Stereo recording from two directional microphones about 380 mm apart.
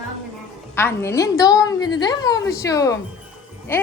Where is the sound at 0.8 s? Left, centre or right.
Centre.